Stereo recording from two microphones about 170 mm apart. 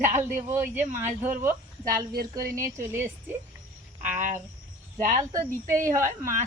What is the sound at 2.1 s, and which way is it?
Speech, 60° right (ahead or behind).